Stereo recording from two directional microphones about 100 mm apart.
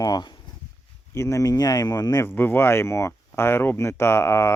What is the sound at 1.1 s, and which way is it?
Speech, 30° left (ahead or behind).